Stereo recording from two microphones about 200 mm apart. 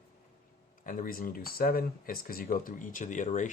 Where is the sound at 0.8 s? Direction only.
40° left (ahead or behind).